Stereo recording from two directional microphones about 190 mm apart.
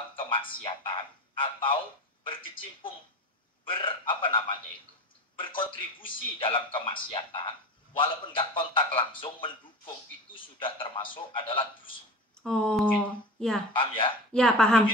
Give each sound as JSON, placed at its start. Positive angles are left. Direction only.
{"t": 0.2, "sound": "music", "side_deg": 25}
{"t": 0.6, "sound": "a man's voice", "side_deg": 25}
{"t": 12.4, "sound": "speech", "side_deg": 5}
{"t": 13.7, "sound": "a man's voice", "side_deg": 25}
{"t": 14.3, "sound": "speech", "side_deg": 5}